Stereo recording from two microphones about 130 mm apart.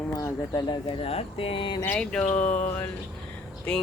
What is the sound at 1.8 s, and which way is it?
Speech, 10° left (ahead or behind).